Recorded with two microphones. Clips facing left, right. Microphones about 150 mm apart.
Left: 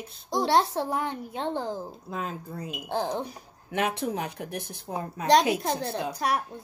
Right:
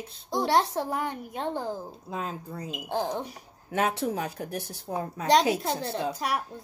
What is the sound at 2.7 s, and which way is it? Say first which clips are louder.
Speech: even; centre (ahead or behind).